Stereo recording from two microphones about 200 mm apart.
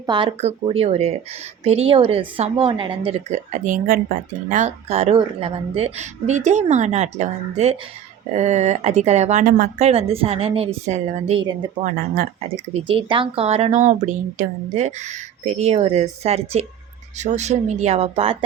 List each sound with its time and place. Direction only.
0.0 s a woman's voice: 25° right (ahead or behind)
11.8 s speech: 45° right (ahead or behind)
12.9 s a woman's voice: 25° right (ahead or behind)